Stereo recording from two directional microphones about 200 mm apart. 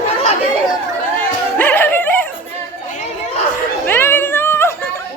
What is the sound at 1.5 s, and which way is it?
Music, 10° left (ahead or behind).